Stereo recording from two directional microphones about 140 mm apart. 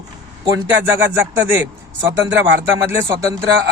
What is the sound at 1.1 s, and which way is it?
Speech, 20° right (ahead or behind).